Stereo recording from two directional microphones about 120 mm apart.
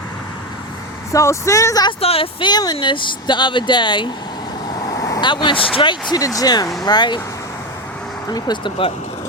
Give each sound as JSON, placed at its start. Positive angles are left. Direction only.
{"t": 1.1, "sound": "speech", "side_deg": 25}
{"t": 1.9, "sound": "speech", "side_deg": 55}
{"t": 2.5, "sound": "speech", "side_deg": 35}
{"t": 5.2, "sound": "speech", "side_deg": 40}
{"t": 8.3, "sound": "speech", "side_deg": 35}